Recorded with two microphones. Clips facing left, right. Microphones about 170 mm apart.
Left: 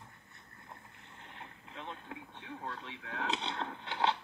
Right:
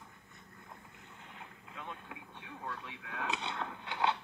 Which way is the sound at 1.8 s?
30° left (ahead or behind).